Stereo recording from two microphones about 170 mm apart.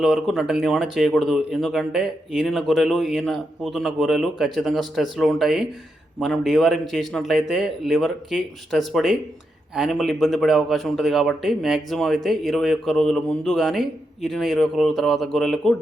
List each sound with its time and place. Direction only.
0.0 s a man's voice: centre (ahead or behind)